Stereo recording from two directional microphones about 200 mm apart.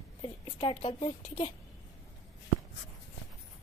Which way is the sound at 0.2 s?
25° left (ahead or behind).